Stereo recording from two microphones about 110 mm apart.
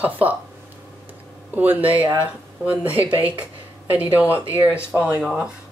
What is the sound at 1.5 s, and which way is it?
A woman's voice, 15° right (ahead or behind).